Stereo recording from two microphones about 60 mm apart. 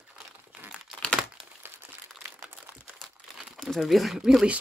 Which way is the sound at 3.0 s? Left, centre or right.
Centre.